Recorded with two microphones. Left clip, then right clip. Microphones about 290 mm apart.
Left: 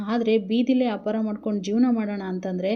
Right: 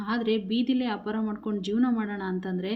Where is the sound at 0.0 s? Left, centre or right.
Centre.